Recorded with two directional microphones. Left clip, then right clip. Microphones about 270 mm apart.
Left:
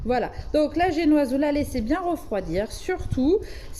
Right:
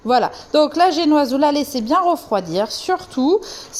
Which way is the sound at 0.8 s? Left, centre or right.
Centre.